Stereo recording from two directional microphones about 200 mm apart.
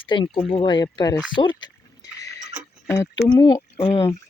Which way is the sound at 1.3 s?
25° left (ahead or behind).